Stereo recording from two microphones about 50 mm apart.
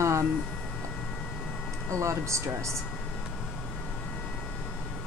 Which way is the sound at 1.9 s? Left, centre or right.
Right.